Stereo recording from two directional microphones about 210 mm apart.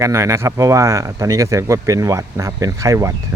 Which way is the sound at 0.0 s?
15° right (ahead or behind).